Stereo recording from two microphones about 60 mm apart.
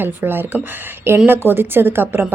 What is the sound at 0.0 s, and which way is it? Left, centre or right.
A woman's voice, right.